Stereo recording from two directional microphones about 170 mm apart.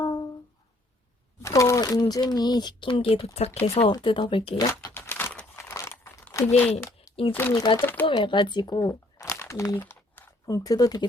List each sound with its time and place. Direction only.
0.0 s music: 25° left (ahead or behind)
1.4 s crumpling: 20° left (ahead or behind)
2.3 s speech: 25° left (ahead or behind)
4.9 s crumpling: 10° left (ahead or behind)
7.3 s speech: 15° left (ahead or behind)
8.0 s speech: 30° left (ahead or behind)